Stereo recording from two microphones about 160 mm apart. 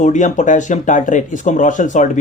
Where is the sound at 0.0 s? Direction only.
50° left (ahead or behind).